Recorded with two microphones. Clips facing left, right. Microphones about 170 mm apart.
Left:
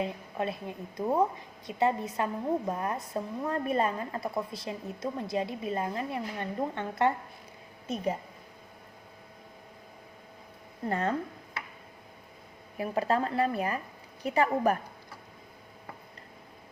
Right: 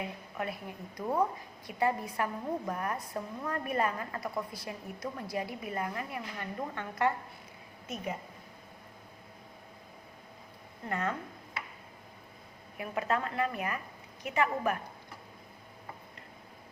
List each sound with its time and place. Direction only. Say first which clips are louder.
0.0 s a woman's voice: left 5 dB; 25° left (ahead or behind)
10.8 s a woman's voice: left 4 dB; 30° left (ahead or behind)
12.8 s a woman's voice: left 4 dB; 35° left (ahead or behind)